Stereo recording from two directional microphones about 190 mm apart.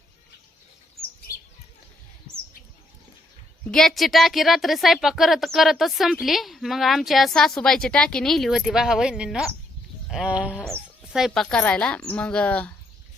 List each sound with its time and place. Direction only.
3.7 s a woman's voice: centre (ahead or behind)
10.1 s a sound: 5° right (ahead or behind)
10.6 s a woman's voice: centre (ahead or behind)